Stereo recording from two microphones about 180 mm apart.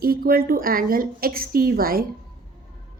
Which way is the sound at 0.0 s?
55° right (ahead or behind).